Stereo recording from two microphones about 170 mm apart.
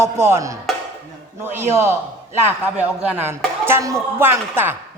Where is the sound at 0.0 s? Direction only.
15° right (ahead or behind).